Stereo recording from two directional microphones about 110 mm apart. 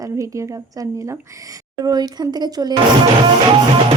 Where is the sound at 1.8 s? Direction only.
40° right (ahead or behind).